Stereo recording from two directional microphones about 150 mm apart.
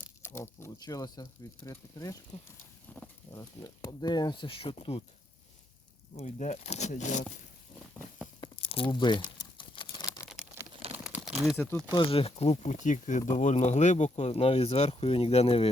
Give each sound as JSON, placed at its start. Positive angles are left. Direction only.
{"t": 0.3, "sound": "speech", "side_deg": 15}
{"t": 3.3, "sound": "speech", "side_deg": 20}
{"t": 6.1, "sound": "speech", "side_deg": 50}
{"t": 8.4, "sound": "crumpling", "side_deg": 40}
{"t": 10.9, "sound": "crumpling", "side_deg": -10}
{"t": 11.9, "sound": "speech", "side_deg": 35}